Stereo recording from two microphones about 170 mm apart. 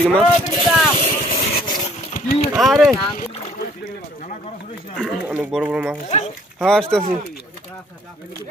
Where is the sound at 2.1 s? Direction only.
55° left (ahead or behind).